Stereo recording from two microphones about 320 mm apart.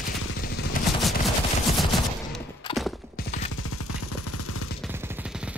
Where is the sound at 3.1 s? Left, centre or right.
Left.